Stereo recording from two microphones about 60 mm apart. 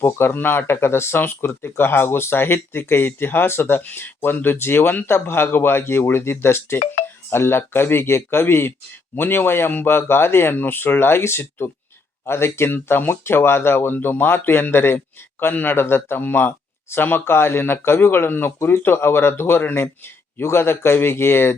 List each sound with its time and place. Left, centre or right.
0.0 s speech: left